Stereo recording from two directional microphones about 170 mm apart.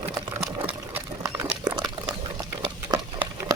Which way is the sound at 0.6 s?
10° right (ahead or behind).